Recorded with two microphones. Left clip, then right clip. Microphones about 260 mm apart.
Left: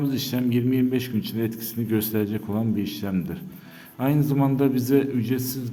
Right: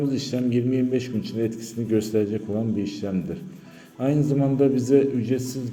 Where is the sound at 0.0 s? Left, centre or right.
Centre.